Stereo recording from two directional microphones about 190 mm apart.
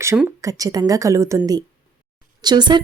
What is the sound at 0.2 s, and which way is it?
A woman's voice, 15° right (ahead or behind).